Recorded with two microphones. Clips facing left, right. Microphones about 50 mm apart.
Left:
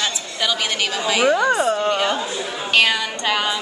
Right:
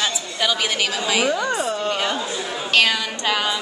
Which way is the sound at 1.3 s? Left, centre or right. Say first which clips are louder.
Left 5 dB; centre.